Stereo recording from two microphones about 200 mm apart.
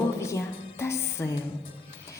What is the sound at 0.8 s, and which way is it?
Music, 15° left (ahead or behind).